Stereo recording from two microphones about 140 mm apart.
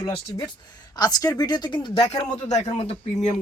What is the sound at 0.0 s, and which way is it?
Speech, 30° left (ahead or behind).